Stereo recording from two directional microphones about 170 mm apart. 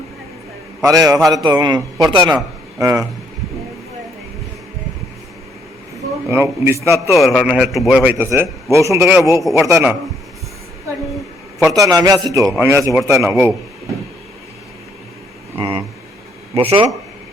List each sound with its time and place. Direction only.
0.8 s a man's voice: 20° right (ahead or behind)
6.2 s a man's voice: 15° right (ahead or behind)
7.1 s a man's voice: centre (ahead or behind)
8.7 s a man's voice: 20° right (ahead or behind)
11.7 s a man's voice: 20° right (ahead or behind)
15.5 s a sound: 30° right (ahead or behind)
16.6 s speech: 35° right (ahead or behind)